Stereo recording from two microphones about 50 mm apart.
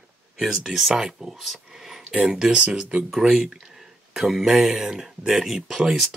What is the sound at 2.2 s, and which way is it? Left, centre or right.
Speech, centre.